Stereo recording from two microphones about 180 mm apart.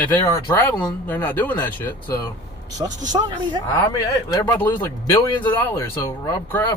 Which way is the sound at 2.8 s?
20° right (ahead or behind).